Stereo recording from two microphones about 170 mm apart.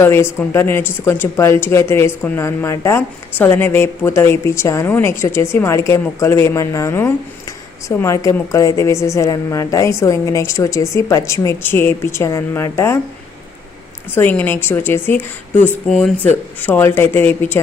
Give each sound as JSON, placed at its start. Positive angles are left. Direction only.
{"t": 0.0, "sound": "speech", "side_deg": 15}
{"t": 14.2, "sound": "speech", "side_deg": 10}
{"t": 15.9, "sound": "speech", "side_deg": 0}
{"t": 16.6, "sound": "speech", "side_deg": 10}